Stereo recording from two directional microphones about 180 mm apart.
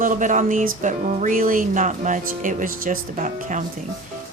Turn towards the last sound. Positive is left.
turn(degrees=-45)  # may be behind; listen again after turning